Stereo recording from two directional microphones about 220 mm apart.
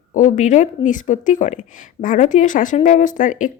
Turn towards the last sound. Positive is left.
turn(degrees=35)  # may be behind; listen again after turning